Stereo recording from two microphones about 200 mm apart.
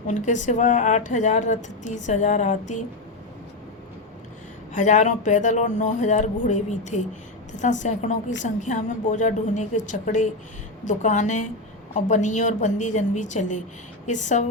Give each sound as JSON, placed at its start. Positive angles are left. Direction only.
{"t": 0.1, "sound": "speech", "side_deg": 35}
{"t": 4.7, "sound": "speech", "side_deg": 40}